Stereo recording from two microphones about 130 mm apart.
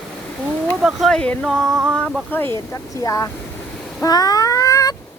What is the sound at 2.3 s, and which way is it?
Speech, 15° left (ahead or behind).